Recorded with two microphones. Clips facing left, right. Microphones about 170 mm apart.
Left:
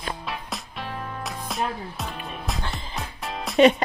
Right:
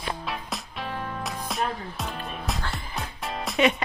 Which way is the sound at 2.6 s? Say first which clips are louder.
Left 1 dB; 20° left (ahead or behind).